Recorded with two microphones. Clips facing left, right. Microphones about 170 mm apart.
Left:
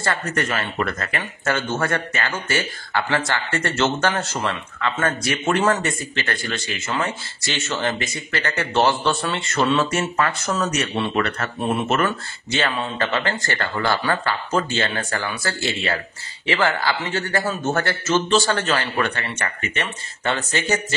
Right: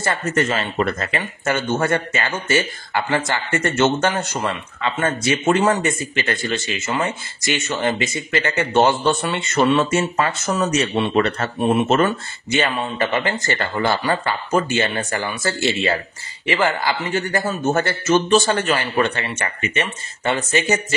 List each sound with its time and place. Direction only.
0.0 s a man's voice: 20° right (ahead or behind)